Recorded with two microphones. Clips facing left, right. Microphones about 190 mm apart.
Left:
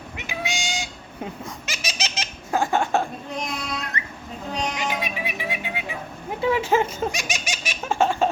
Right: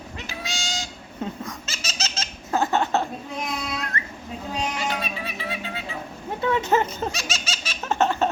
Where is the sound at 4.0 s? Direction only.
20° left (ahead or behind).